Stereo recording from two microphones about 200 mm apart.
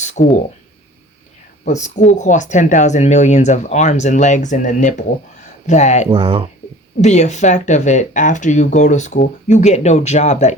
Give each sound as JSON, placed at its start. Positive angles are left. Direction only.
{"t": 0.0, "sound": "a sound", "side_deg": 35}
{"t": 1.6, "sound": "speech", "side_deg": 35}
{"t": 6.1, "sound": "speech", "side_deg": -25}
{"t": 7.0, "sound": "speech", "side_deg": 35}